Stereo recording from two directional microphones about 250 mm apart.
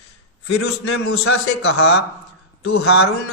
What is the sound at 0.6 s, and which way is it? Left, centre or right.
A man's voice, left.